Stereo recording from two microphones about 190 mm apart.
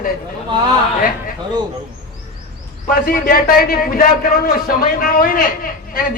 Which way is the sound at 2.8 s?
50° left (ahead or behind).